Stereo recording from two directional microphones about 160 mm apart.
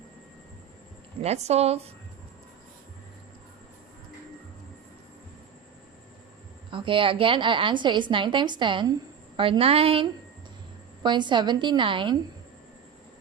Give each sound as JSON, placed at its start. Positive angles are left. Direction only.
{"t": 1.2, "sound": "a woman's voice", "side_deg": -40}
{"t": 6.7, "sound": "a woman's voice", "side_deg": -30}